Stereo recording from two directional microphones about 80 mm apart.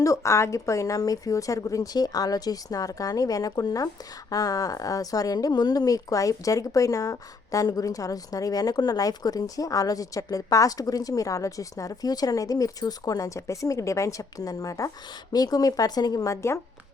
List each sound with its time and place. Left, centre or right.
0.0 s speech: left